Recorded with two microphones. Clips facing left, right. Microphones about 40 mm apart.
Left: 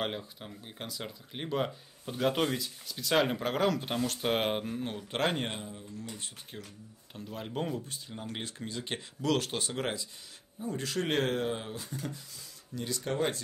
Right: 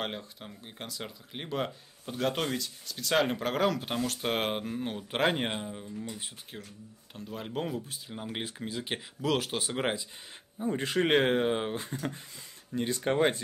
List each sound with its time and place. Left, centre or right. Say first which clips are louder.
0.0 s speech: left 1 dB; centre
5.5 s speech: right 4 dB; right
5.9 s speech: right 3 dB; centre
8.1 s speech: right 3 dB; centre
9.8 s speech: right 3 dB; right